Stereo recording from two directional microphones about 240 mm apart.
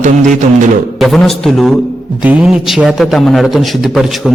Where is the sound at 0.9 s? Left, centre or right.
Centre.